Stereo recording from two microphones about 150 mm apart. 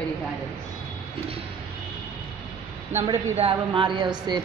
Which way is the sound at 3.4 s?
35° right (ahead or behind).